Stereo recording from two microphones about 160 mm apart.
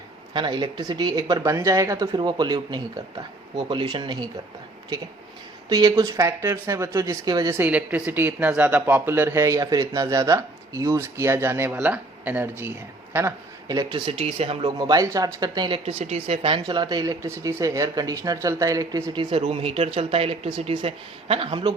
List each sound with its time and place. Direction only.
0.3 s speech: 30° right (ahead or behind)
5.6 s speech: 25° right (ahead or behind)
7.6 s speech: 10° right (ahead or behind); by 14.7 s 40° right (ahead or behind)
14.8 s speech: 25° right (ahead or behind)
19.1 s speech: 35° right (ahead or behind)